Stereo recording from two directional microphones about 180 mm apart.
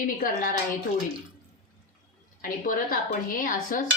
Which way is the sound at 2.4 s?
50° left (ahead or behind).